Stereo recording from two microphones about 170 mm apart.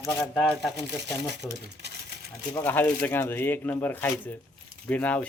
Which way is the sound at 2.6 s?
10° left (ahead or behind).